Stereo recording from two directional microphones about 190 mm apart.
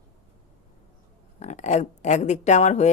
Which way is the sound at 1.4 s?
40° left (ahead or behind).